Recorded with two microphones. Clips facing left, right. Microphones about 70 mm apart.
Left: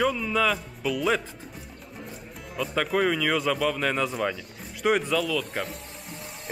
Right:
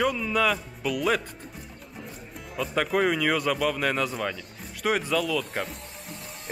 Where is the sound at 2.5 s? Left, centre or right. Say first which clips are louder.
Even; centre.